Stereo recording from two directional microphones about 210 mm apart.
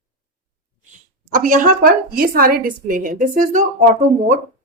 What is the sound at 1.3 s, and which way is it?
A woman's voice, 40° right (ahead or behind).